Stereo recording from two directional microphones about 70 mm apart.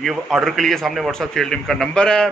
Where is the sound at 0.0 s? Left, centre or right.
Centre.